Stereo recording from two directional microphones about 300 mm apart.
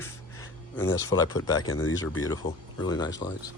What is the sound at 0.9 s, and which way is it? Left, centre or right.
Speech, centre.